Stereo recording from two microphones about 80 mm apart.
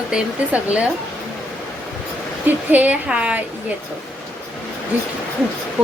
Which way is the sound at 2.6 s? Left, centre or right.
Centre.